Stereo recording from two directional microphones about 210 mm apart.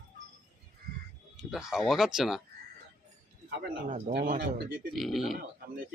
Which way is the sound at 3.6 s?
35° right (ahead or behind).